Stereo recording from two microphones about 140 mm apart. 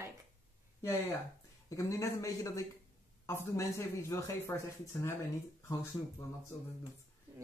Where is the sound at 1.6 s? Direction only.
20° left (ahead or behind).